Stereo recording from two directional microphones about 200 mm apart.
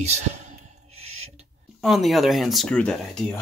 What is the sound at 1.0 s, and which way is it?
Owl, 90° right.